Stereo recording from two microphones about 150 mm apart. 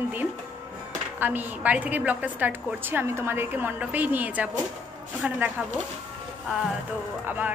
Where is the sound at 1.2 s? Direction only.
10° right (ahead or behind).